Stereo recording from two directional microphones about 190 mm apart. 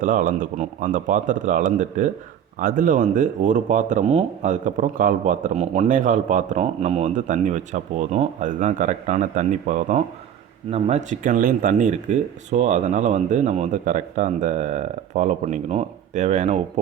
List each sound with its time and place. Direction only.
0.0 s speech: 45° right (ahead or behind)